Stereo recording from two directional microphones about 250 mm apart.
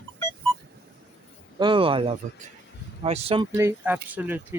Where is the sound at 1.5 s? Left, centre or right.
Centre.